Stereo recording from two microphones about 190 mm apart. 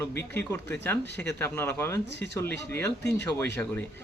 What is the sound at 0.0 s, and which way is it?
Speech, 10° left (ahead or behind).